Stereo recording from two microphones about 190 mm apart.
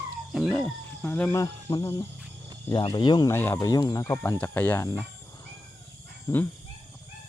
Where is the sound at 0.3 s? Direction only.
5° left (ahead or behind).